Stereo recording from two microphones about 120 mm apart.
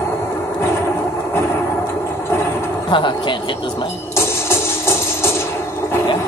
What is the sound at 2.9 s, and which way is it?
Speech, 40° left (ahead or behind).